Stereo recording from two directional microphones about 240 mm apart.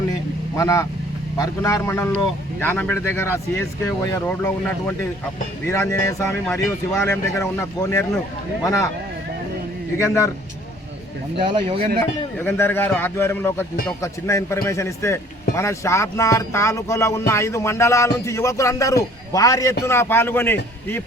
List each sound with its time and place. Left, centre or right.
0.1 s vehicle: centre
1.4 s a man's voice: centre
10.0 s a man's voice: centre
11.3 s speech: centre
12.4 s a man's voice: centre